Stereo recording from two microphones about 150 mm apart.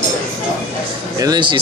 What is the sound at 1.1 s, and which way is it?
Speech, 30° right (ahead or behind).